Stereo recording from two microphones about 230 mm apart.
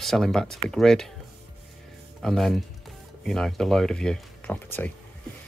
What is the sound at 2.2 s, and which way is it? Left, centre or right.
Speech, centre.